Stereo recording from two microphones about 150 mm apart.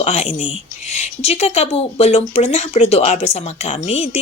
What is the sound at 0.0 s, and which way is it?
Speech, 45° left (ahead or behind).